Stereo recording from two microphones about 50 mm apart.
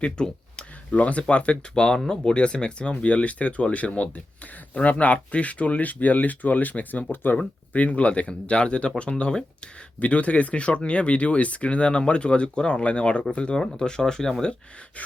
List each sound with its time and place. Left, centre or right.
0.0 s a sound: centre
0.9 s speech: left
7.7 s speech: left; by 14.5 s centre